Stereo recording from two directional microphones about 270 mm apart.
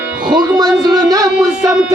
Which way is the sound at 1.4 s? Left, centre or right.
Centre.